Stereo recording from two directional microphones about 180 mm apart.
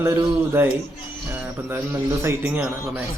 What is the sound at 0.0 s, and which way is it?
Speech, 15° right (ahead or behind).